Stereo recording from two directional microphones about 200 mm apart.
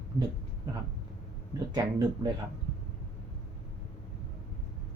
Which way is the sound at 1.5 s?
20° right (ahead or behind).